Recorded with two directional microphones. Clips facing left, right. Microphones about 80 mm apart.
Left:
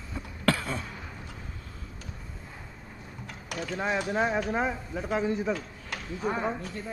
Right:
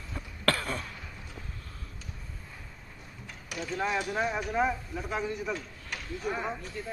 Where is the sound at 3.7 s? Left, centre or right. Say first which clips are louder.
Left 2 dB; left.